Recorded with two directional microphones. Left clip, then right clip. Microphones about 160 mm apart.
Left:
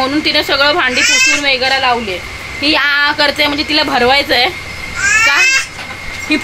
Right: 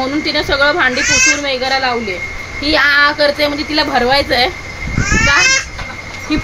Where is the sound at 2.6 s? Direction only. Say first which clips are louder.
Right 1 dB; 15° left (ahead or behind).